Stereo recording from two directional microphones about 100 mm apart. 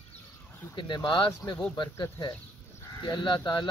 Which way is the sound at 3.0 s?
55° left (ahead or behind).